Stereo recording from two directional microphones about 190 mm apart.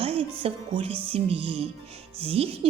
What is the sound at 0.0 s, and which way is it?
A woman's voice, 30° right (ahead or behind).